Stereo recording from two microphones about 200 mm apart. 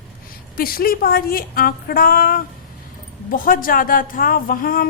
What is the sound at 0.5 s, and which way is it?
A woman's voice, 45° left (ahead or behind).